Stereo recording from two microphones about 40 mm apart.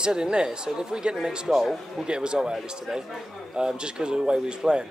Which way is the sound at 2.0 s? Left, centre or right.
Right.